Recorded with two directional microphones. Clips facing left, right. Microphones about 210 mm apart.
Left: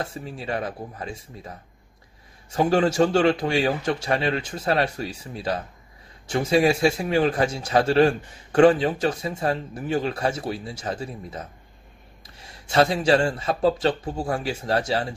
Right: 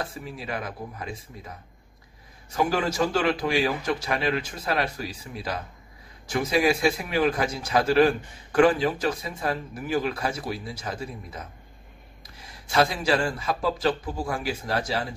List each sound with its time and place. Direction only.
0.0 s a man's voice: 30° left (ahead or behind)
2.5 s a man's voice: 30° left (ahead or behind)
12.7 s a man's voice: 25° left (ahead or behind)